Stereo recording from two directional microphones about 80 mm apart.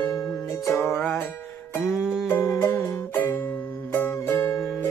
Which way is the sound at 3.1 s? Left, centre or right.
Left.